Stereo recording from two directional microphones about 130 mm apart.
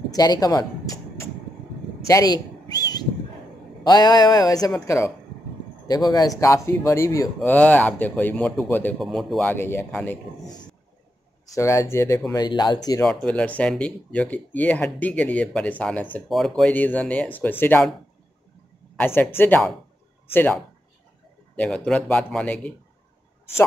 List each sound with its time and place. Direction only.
0.1 s music: 30° left (ahead or behind)
2.0 s a sound: 25° left (ahead or behind)
3.8 s speech: 30° left (ahead or behind)
7.4 s speech: 10° left (ahead or behind)
9.0 s speech: centre (ahead or behind)
9.4 s speech: 15° left (ahead or behind)
11.5 s speech: 20° left (ahead or behind)
12.3 s speech: 30° left (ahead or behind)
13.0 s speech: 5° left (ahead or behind)
16.7 s speech: 10° left (ahead or behind)
18.9 s speech: 15° left (ahead or behind)
21.5 s speech: 5° left (ahead or behind)